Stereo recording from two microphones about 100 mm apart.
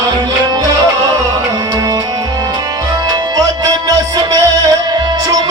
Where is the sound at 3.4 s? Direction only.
40° right (ahead or behind).